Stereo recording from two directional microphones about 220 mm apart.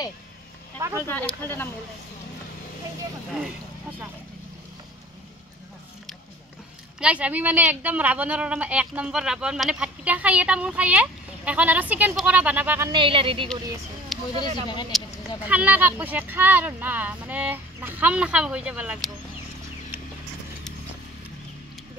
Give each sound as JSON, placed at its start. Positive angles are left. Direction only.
{"t": 0.9, "sound": "speech", "side_deg": 10}
{"t": 7.0, "sound": "speech", "side_deg": -5}
{"t": 12.9, "sound": "speech", "side_deg": -25}
{"t": 14.1, "sound": "a sound", "side_deg": 0}
{"t": 14.9, "sound": "speech", "side_deg": -5}